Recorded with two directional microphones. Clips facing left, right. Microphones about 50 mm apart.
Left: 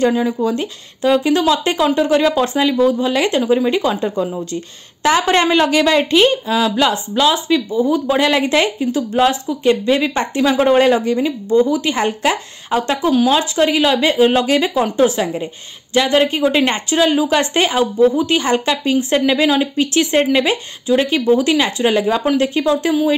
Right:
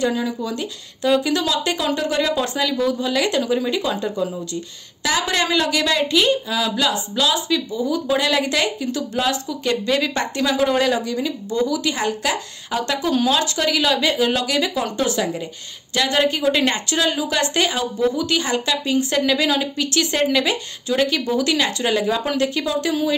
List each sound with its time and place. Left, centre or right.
0.0 s a woman's voice: left